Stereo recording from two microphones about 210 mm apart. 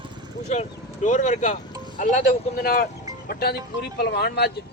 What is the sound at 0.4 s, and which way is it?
Speech, 35° left (ahead or behind).